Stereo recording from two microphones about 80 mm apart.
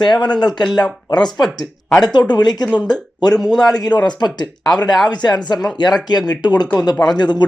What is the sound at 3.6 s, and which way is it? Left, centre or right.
Speech, left.